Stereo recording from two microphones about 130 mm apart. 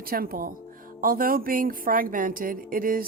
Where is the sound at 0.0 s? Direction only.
90° right.